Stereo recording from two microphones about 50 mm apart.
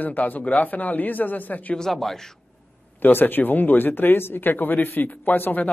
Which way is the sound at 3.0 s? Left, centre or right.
Left.